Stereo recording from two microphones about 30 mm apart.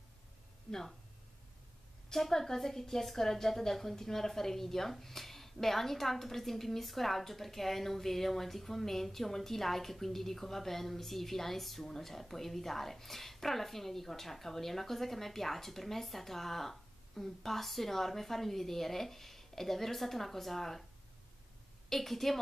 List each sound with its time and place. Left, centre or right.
0.7 s speech: centre
2.0 s a woman's voice: centre
21.8 s a woman's voice: centre